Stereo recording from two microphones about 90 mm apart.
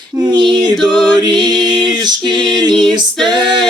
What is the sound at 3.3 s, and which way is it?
Music, 55° right (ahead or behind).